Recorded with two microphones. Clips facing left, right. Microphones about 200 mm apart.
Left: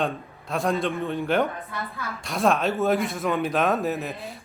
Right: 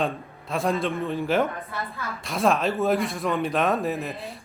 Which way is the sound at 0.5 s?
Centre (ahead or behind).